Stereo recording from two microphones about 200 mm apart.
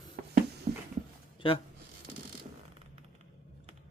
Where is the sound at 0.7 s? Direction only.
30° right (ahead or behind).